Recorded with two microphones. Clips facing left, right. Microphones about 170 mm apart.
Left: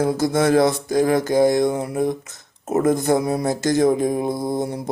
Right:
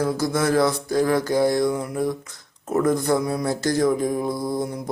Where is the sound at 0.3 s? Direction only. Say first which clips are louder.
Left 4 dB; 25° left (ahead or behind).